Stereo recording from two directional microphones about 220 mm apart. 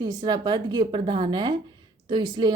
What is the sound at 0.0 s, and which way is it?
A woman's voice, 20° right (ahead or behind).